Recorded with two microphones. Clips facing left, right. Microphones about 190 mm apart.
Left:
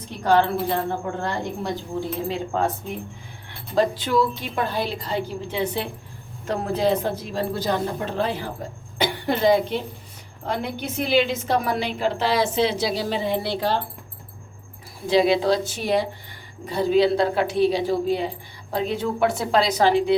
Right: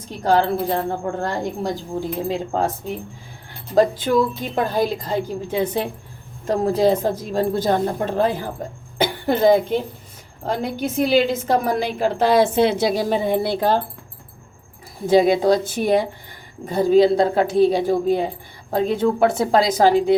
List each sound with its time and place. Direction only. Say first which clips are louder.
0.2 s a woman's voice: right 1 dB; 35° right (ahead or behind)
3.8 s a woman's voice: right 4 dB; 50° right (ahead or behind)
15.0 s a woman's voice: right 4 dB; 45° right (ahead or behind)